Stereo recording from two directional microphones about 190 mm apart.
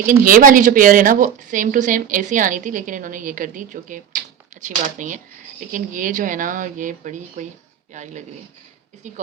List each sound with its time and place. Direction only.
0.1 s speech: 45° right (ahead or behind)